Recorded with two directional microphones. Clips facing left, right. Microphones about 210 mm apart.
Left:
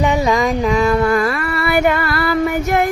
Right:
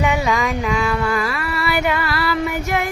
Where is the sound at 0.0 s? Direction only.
35° left (ahead or behind).